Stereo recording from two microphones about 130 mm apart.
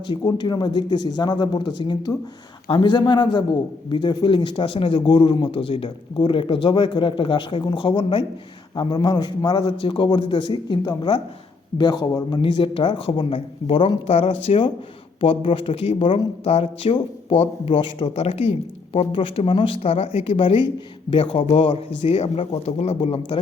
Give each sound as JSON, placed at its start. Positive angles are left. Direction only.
{"t": 0.1, "sound": "a man's voice", "side_deg": 35}